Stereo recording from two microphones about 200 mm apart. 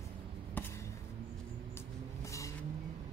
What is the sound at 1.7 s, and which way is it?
Vehicle, 15° left (ahead or behind).